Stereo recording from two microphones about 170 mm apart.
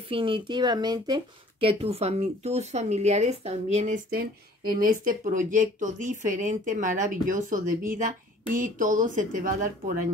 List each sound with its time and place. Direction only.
0.1 s speech: 30° right (ahead or behind); by 10.0 s 50° right (ahead or behind)